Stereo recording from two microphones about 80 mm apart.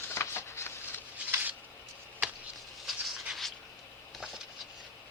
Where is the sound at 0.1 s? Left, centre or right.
Left.